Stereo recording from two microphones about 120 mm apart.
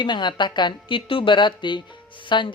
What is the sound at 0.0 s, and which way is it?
Speech, 40° left (ahead or behind).